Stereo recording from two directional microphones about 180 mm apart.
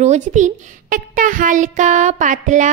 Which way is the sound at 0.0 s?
40° right (ahead or behind).